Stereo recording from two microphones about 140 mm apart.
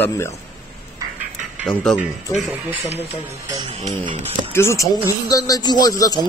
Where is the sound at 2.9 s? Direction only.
45° left (ahead or behind).